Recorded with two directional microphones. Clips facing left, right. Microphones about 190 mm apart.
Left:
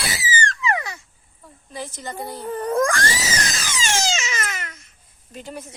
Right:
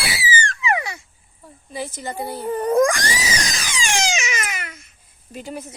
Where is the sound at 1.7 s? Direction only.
5° right (ahead or behind).